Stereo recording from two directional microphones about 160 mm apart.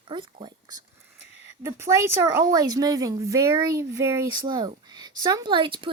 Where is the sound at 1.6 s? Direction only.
20° right (ahead or behind).